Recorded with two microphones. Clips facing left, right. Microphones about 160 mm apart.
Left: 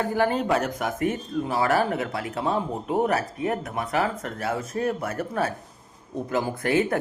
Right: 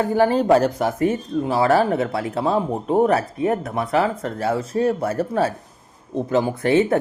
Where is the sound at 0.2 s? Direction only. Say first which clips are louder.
Right 8 dB; 35° right (ahead or behind).